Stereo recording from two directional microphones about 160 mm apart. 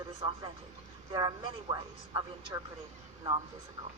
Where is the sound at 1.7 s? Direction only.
20° right (ahead or behind).